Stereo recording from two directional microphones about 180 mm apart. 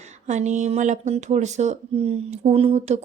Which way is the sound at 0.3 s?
40° right (ahead or behind).